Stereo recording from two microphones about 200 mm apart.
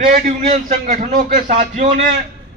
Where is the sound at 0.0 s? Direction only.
40° right (ahead or behind).